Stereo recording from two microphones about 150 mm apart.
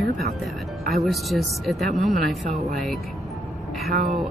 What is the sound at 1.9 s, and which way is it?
Speech, 55° right (ahead or behind).